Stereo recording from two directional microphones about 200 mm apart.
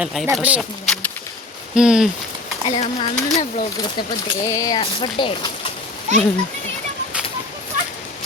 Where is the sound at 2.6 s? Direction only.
30° left (ahead or behind).